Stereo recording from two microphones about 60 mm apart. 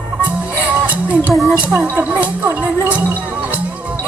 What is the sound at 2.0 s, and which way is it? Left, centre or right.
Speech, right.